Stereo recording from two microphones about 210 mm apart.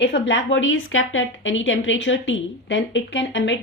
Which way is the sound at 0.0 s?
60° left (ahead or behind).